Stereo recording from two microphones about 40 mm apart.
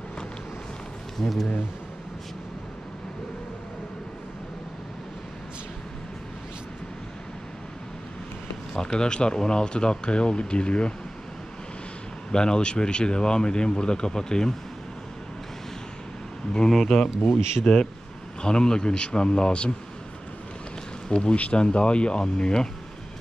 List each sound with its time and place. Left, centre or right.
1.1 s speech: centre
8.7 s speech: centre
12.3 s speech: centre
16.5 s speech: centre
17.7 s speech: left
21.1 s speech: left